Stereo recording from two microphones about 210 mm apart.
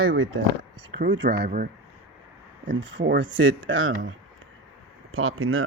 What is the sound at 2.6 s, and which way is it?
Speech, 60° right (ahead or behind).